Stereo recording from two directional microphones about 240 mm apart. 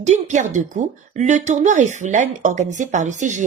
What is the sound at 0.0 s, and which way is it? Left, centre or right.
Speech, right.